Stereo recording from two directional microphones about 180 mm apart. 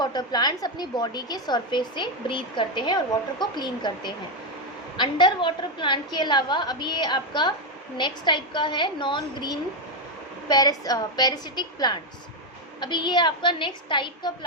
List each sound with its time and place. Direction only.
0.0 s a woman's voice: 25° left (ahead or behind)